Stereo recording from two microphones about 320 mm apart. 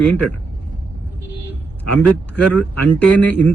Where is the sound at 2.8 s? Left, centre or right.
Centre.